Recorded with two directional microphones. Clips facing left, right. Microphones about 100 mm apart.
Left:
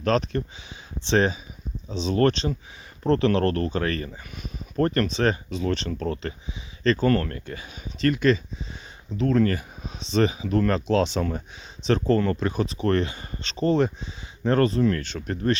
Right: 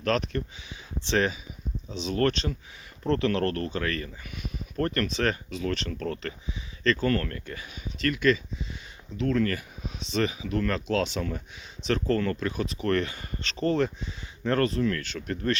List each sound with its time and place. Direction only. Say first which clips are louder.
0.0 s speech: left 4 dB; 30° left (ahead or behind)